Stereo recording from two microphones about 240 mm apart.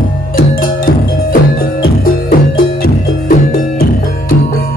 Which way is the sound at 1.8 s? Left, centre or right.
Left.